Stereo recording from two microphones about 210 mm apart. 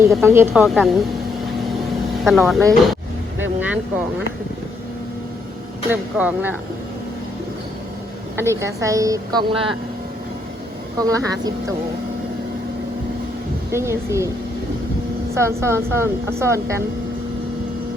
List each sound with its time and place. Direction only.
0.2 s speech: 10° right (ahead or behind)
2.2 s speech: centre (ahead or behind)
3.6 s vehicle: 10° right (ahead or behind)
5.9 s a woman's voice: 10° right (ahead or behind)
8.4 s a woman's voice: 15° right (ahead or behind)
10.9 s a woman's voice: 15° right (ahead or behind)
13.7 s a woman's voice: 10° right (ahead or behind)
15.4 s a woman's voice: 10° right (ahead or behind)